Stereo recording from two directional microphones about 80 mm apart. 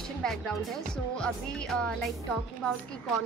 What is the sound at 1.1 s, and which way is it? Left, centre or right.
Speech, centre.